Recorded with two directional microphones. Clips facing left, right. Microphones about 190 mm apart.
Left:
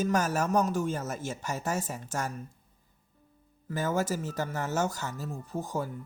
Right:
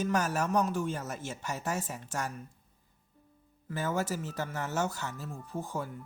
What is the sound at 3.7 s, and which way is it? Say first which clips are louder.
Speech: left 3 dB; 45° left (ahead or behind).